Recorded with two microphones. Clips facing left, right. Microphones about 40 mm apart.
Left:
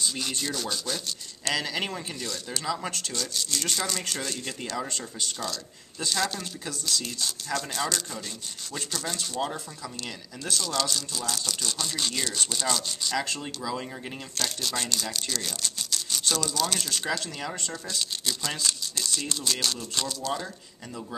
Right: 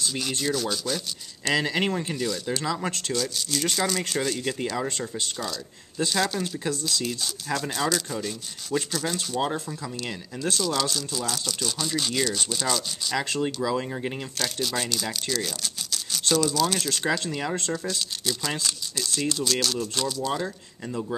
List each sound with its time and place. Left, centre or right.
0.0 s speech: centre
1.5 s speech: right
2.5 s speech: centre
13.2 s speech: centre
14.4 s speech: centre
17.8 s speech: centre
20.2 s speech: centre